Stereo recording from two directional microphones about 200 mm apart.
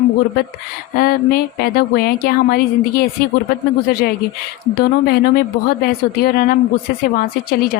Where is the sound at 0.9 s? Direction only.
50° left (ahead or behind).